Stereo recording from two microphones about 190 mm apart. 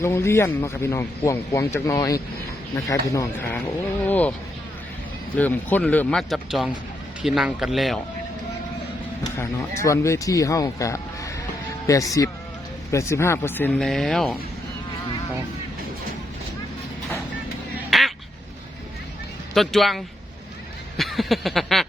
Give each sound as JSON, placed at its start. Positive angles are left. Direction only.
{"t": 0.0, "sound": "speech", "side_deg": 15}
{"t": 5.4, "sound": "speech", "side_deg": 10}
{"t": 9.2, "sound": "speech", "side_deg": 15}
{"t": 17.7, "sound": "quack", "side_deg": 0}
{"t": 19.5, "sound": "speech", "side_deg": 0}
{"t": 21.0, "sound": "speech", "side_deg": 0}